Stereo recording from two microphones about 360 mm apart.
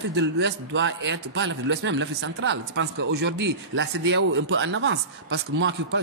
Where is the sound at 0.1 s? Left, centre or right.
Right.